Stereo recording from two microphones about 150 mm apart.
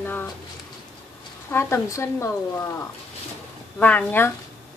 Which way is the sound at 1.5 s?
20° left (ahead or behind).